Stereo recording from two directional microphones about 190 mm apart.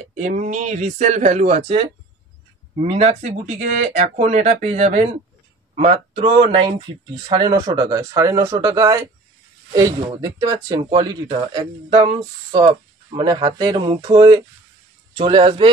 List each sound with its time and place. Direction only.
0.2 s speech: 45° right (ahead or behind); by 15.7 s 25° right (ahead or behind)